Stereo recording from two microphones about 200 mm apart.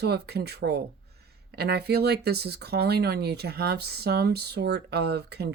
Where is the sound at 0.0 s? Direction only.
55° right (ahead or behind).